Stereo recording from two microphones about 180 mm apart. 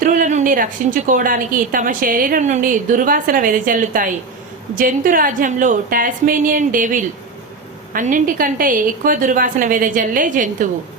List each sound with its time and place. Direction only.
0.0 s a woman's voice: 45° right (ahead or behind)